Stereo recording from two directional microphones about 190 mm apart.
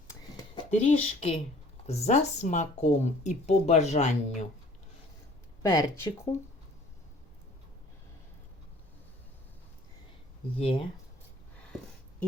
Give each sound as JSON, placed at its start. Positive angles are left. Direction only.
{"t": 0.1, "sound": "a sound", "side_deg": 20}
{"t": 0.7, "sound": "speech", "side_deg": 35}
{"t": 5.6, "sound": "speech", "side_deg": 15}